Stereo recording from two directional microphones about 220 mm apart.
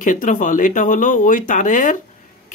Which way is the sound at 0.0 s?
35° left (ahead or behind).